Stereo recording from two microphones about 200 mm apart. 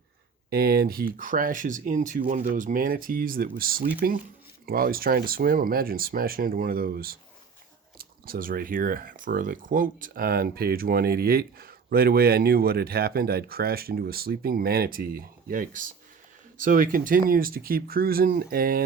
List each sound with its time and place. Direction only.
0.5 s speech: 50° right (ahead or behind)